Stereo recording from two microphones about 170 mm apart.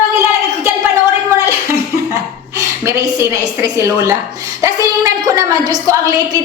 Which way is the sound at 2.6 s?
15° right (ahead or behind).